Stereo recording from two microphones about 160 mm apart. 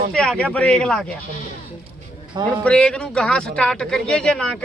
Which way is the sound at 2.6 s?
5° left (ahead or behind).